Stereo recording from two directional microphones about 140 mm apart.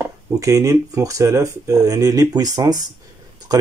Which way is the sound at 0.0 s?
25° right (ahead or behind).